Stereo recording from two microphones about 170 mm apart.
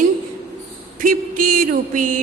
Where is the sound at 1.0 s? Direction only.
55° right (ahead or behind).